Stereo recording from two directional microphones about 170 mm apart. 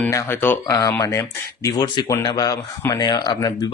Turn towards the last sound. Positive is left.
turn(degrees=20)  # may be behind; listen again after turning